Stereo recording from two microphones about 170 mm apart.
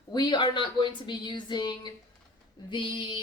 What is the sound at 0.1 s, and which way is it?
Speech, 25° left (ahead or behind).